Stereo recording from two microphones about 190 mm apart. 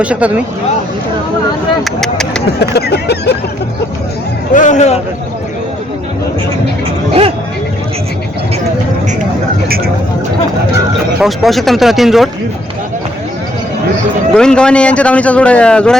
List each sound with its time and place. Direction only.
0.0 s speech: 5° right (ahead or behind)
1.8 s a man's voice: 5° left (ahead or behind)
2.5 s speech: 60° left (ahead or behind)
4.5 s speech: 40° left (ahead or behind)
7.1 s speech: 30° right (ahead or behind)
9.6 s speech: 50° right (ahead or behind)
11.2 s a man's voice: centre (ahead or behind)
14.3 s a man's voice: 5° left (ahead or behind)